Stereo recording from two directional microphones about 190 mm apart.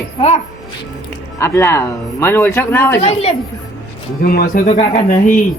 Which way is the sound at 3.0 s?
30° left (ahead or behind).